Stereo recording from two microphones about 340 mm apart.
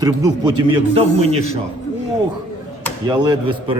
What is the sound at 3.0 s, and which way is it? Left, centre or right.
Speech, centre.